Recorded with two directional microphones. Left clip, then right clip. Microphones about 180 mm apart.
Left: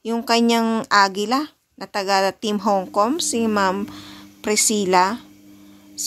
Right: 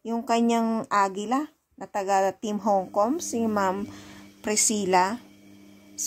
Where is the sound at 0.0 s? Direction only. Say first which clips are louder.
Left 6 dB; 10° left (ahead or behind).